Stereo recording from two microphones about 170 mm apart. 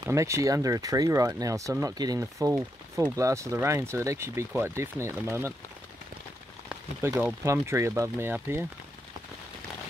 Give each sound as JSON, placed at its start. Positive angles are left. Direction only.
{"t": 0.0, "sound": "speech", "side_deg": -15}
{"t": 7.0, "sound": "speech", "side_deg": -15}